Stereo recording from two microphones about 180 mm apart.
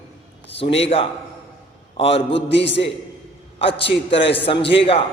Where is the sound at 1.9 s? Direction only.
30° left (ahead or behind).